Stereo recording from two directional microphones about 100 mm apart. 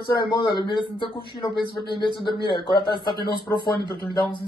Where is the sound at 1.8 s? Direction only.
50° left (ahead or behind).